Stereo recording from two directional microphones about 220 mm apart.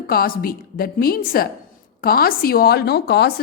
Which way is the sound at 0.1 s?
40° left (ahead or behind).